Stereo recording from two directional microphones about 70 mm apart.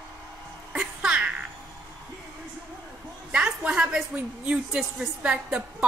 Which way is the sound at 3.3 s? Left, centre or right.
Centre.